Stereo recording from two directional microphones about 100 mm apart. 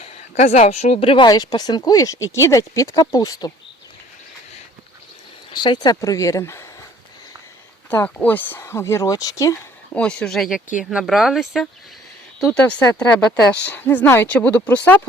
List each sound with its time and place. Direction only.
0.0 s a woman's voice: 90° left; by 1.3 s 65° left (ahead or behind)
1.3 s speech: 40° left (ahead or behind)
5.5 s speech: 50° left (ahead or behind)
6.0 s speech: 35° left (ahead or behind)
7.9 s speech: 15° left (ahead or behind); by 9.6 s 35° left (ahead or behind)
9.9 s speech: 10° left (ahead or behind)
12.5 s speech: 15° left (ahead or behind)